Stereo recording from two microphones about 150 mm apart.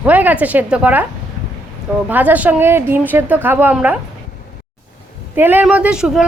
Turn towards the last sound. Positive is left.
turn(degrees=-5)  # may be behind; listen again after turning